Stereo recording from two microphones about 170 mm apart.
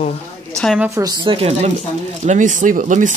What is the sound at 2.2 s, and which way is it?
Speech, 45° right (ahead or behind).